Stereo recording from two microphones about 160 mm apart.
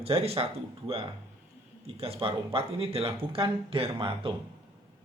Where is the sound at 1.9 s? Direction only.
35° right (ahead or behind).